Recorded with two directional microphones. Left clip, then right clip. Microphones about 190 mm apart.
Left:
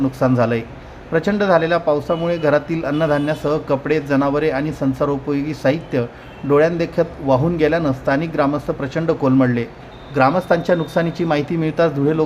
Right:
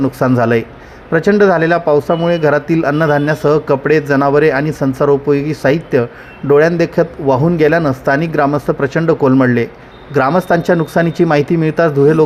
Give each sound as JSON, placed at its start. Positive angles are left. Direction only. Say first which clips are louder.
{"t": 0.0, "sound": "speech", "louder": "right 4 dB", "side_deg": -30}